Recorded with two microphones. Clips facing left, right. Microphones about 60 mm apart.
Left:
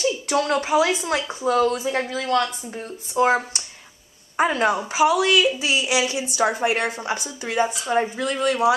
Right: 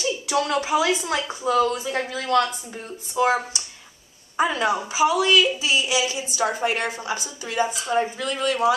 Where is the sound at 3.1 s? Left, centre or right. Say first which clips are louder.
Left 2 dB; left.